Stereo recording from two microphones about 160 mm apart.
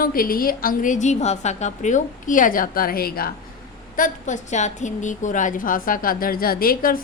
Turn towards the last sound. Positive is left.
turn(degrees=65)  # may be behind; listen again after turning